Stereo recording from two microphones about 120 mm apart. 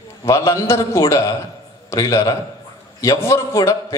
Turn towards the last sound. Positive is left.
turn(degrees=25)  # may be behind; listen again after turning